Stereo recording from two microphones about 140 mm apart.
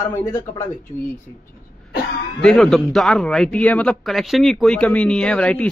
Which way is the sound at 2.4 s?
5° left (ahead or behind).